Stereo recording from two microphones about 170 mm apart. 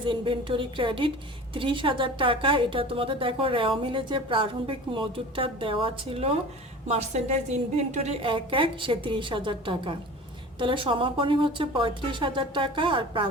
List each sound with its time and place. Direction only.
0.0 s a woman's voice: 30° right (ahead or behind)